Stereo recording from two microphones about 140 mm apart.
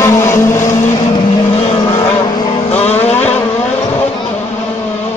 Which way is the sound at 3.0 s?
15° left (ahead or behind).